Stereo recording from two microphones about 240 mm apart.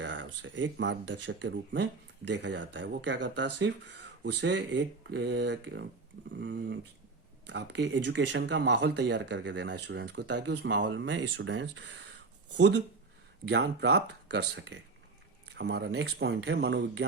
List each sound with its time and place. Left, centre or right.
0.0 s speech: right